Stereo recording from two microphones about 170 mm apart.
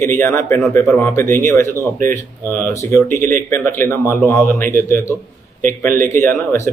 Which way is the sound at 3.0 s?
45° right (ahead or behind).